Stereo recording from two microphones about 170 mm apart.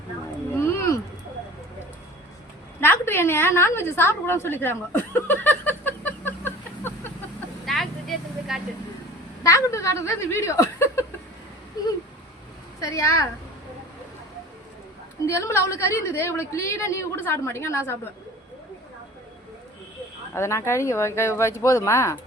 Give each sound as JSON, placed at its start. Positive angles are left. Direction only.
{"t": 0.5, "sound": "a sound", "side_deg": 15}
{"t": 2.8, "sound": "a sound", "side_deg": 15}
{"t": 7.6, "sound": "vehicle", "side_deg": 0}
{"t": 9.4, "sound": "a woman's voice", "side_deg": 15}
{"t": 12.8, "sound": "a woman's voice", "side_deg": 15}
{"t": 15.3, "sound": "a woman's voice", "side_deg": 15}
{"t": 20.3, "sound": "a woman's voice", "side_deg": 15}